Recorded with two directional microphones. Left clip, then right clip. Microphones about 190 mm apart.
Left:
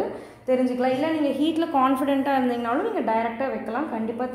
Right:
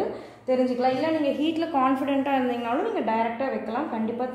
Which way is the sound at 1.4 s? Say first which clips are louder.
Left 2 dB; 25° left (ahead or behind).